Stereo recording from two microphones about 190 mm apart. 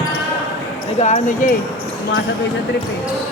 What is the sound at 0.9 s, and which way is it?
Speech, 40° left (ahead or behind).